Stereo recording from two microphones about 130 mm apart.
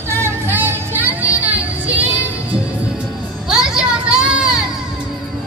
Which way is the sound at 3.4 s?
5° right (ahead or behind).